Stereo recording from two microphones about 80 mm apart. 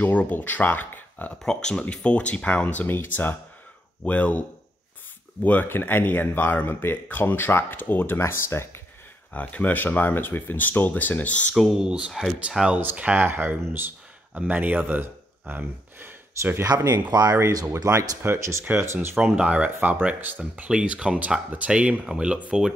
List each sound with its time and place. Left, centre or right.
0.0 s speech: left
1.4 s speech: centre; by 8.8 s left
9.3 s speech: centre
11.8 s speech: centre
12.1 s speech: centre
12.4 s speech: centre
16.6 s speech: right
18.2 s speech: right
19.1 s speech: centre